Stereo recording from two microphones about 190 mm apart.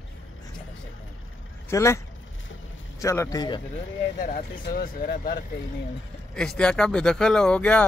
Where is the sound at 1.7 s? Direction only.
15° left (ahead or behind).